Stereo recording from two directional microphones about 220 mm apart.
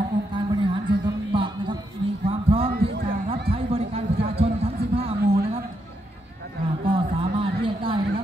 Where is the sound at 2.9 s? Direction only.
40° right (ahead or behind).